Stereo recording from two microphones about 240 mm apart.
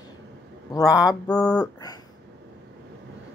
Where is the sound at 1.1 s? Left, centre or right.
Centre.